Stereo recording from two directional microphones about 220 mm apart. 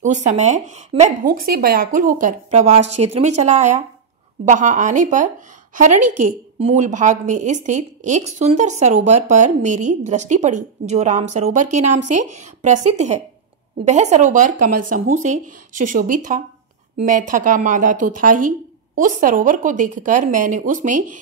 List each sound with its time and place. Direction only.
0.0 s speech: 35° right (ahead or behind)
5.9 s a woman's voice: 90° right
6.6 s speech: 30° right (ahead or behind)